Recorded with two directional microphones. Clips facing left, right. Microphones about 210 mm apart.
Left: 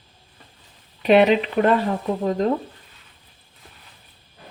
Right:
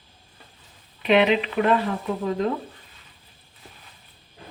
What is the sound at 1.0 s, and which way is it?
Speech, 40° left (ahead or behind).